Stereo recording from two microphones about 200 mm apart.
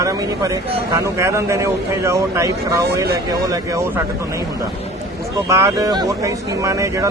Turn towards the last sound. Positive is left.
turn(degrees=-15)  # may be behind; listen again after turning